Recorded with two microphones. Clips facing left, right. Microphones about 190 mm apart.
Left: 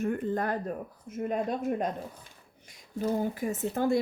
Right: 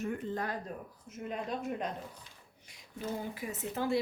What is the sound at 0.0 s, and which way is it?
Speech, 50° left (ahead or behind).